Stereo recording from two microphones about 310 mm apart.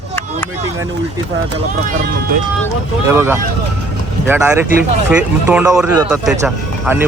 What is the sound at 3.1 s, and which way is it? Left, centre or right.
Speech, centre.